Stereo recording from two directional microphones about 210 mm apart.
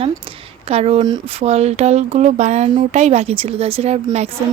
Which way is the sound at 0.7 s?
30° right (ahead or behind).